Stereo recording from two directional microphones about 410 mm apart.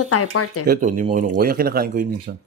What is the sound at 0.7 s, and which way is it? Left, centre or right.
Speech, centre.